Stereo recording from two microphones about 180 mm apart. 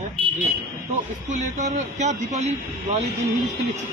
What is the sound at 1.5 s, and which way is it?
Speech, 40° right (ahead or behind).